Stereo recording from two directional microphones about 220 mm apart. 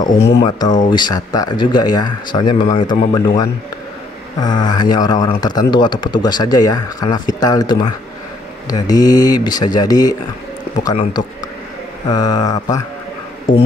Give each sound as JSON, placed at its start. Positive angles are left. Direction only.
{"t": 0.4, "sound": "speech", "side_deg": 20}
{"t": 12.1, "sound": "speech", "side_deg": 20}
{"t": 13.5, "sound": "speech", "side_deg": 35}